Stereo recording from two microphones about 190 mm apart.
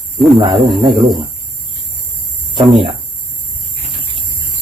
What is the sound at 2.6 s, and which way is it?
Speech, 25° right (ahead or behind).